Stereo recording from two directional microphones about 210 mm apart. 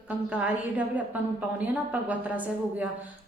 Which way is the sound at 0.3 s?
5° right (ahead or behind).